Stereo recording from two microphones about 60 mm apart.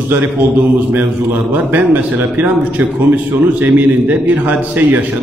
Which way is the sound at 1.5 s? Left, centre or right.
Right.